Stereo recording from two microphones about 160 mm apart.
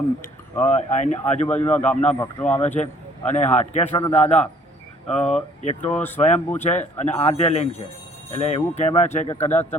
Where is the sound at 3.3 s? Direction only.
45° left (ahead or behind).